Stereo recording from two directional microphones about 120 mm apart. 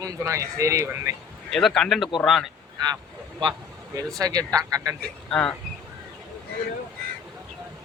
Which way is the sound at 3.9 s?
30° right (ahead or behind).